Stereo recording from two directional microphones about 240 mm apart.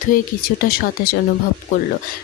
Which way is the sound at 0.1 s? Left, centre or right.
Left.